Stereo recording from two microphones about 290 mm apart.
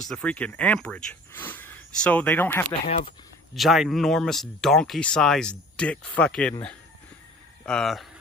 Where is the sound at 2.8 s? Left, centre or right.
Left.